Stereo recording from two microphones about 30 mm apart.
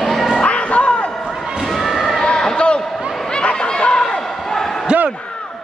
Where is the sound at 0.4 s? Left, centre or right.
Left.